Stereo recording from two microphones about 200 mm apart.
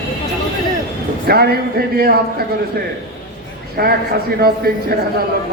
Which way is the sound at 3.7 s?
50° right (ahead or behind).